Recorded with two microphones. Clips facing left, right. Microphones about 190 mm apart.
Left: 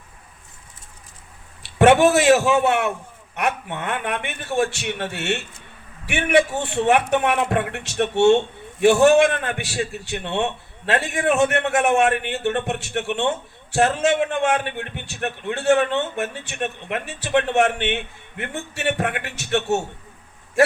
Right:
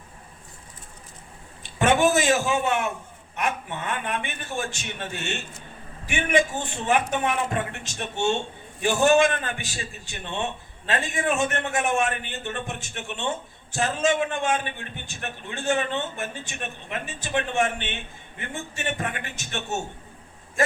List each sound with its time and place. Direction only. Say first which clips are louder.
1.6 s a man's voice: left 6 dB; 65° left (ahead or behind)